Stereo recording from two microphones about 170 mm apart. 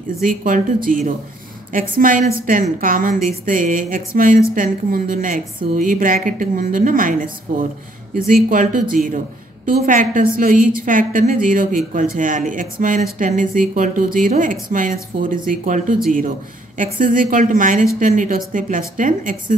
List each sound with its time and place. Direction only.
0.2 s a woman's voice: 55° right (ahead or behind)